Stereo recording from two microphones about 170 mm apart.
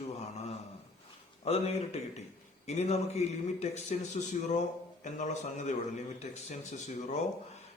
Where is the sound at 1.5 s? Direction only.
40° left (ahead or behind).